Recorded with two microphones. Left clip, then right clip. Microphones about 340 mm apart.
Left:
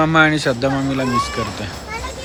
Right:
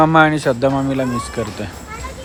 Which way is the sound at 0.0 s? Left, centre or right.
Centre.